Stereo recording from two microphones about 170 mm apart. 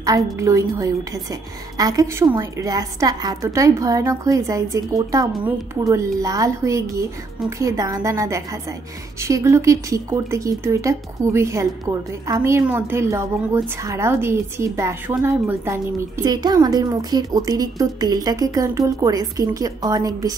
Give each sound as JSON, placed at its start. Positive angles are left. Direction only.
{"t": 0.0, "sound": "a woman's voice", "side_deg": -20}